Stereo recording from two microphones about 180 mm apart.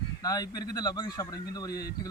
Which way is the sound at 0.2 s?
20° left (ahead or behind).